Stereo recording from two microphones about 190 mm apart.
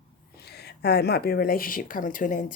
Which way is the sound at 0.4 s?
60° left (ahead or behind).